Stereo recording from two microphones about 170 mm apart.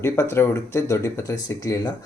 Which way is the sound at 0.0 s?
15° left (ahead or behind).